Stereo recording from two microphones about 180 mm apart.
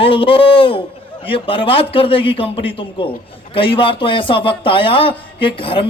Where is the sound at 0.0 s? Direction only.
30° left (ahead or behind).